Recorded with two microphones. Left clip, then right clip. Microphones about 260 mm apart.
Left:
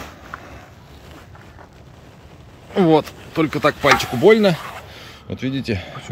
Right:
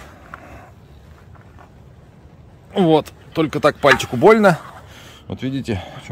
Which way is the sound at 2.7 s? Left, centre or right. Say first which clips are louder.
Even; centre.